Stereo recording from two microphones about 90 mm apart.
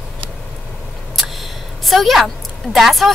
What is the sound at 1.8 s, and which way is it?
A woman's voice, centre (ahead or behind).